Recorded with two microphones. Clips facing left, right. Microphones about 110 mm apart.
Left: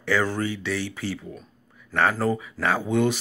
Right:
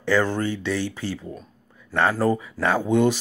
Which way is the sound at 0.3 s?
20° right (ahead or behind).